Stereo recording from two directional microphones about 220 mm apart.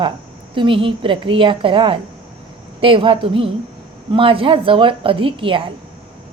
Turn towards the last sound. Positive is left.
turn(degrees=-25)  # may be behind; listen again after turning